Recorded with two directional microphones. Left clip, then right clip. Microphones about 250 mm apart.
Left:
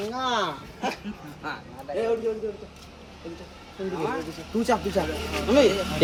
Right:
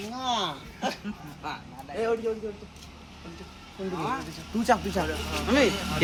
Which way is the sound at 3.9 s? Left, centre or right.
Right.